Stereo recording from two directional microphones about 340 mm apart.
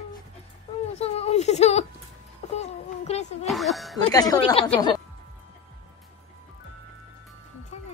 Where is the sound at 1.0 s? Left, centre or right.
Centre.